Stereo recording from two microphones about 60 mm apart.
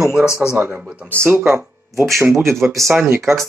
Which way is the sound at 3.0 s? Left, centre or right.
Right.